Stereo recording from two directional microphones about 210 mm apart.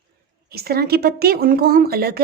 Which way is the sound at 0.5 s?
45° right (ahead or behind).